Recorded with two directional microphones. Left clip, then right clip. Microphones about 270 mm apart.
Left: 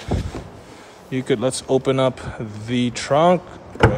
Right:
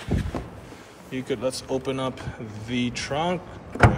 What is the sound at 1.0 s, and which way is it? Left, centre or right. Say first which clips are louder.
Speech: left 6 dB; left.